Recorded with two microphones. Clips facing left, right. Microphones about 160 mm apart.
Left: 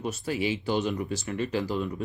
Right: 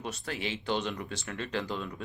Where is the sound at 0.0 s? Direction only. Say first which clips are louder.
Left 7 dB; 5° left (ahead or behind).